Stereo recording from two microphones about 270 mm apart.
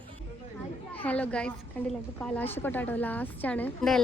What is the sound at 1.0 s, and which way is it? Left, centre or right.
A woman's voice, centre.